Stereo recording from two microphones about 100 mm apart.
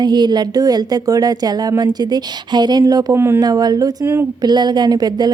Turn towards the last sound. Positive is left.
turn(degrees=-40)  # may be behind; listen again after turning